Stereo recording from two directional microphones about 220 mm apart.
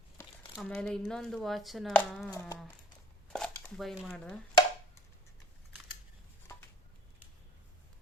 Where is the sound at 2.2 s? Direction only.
15° left (ahead or behind).